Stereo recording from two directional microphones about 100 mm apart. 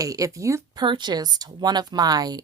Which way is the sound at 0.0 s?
35° right (ahead or behind).